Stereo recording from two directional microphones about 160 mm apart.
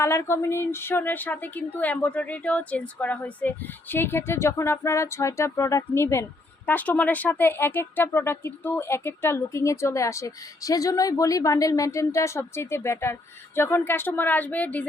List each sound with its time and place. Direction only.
0.0 s speech: 15° left (ahead or behind)